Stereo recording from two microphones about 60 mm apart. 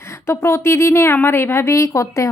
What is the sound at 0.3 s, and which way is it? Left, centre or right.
A woman's voice, left.